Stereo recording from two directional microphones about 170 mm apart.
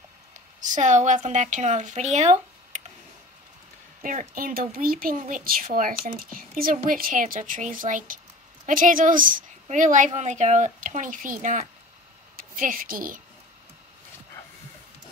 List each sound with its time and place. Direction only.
0.6 s a woman's voice: 45° right (ahead or behind)
4.0 s a woman's voice: 50° right (ahead or behind)